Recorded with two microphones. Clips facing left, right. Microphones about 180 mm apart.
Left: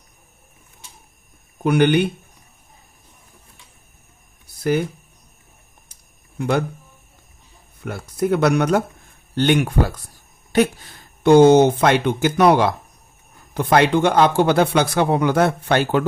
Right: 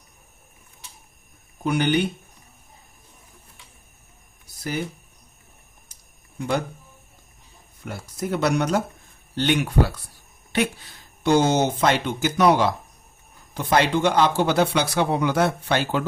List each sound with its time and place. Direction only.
1.6 s speech: 60° left (ahead or behind)
7.9 s speech: 60° left (ahead or behind)